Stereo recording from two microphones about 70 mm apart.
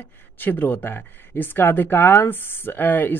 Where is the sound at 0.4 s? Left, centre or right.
Left.